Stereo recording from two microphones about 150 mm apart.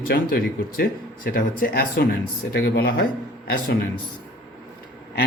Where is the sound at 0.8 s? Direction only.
70° left (ahead or behind); by 3.1 s 90° left.